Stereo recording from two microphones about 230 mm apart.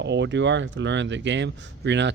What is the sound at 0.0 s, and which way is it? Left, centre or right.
Speech, right.